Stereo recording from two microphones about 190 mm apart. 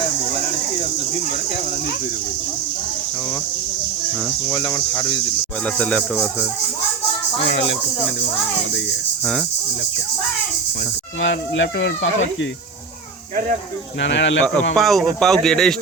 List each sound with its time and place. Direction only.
4.4 s speech: 20° left (ahead or behind)
5.6 s speech: 5° left (ahead or behind)
7.4 s speech: 70° left (ahead or behind)
11.2 s speech: 80° left
14.0 s speech: 70° left (ahead or behind)
14.8 s speech: centre (ahead or behind)